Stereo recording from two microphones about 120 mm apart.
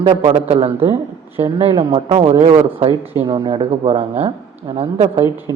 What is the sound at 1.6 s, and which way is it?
Speech, 45° right (ahead or behind).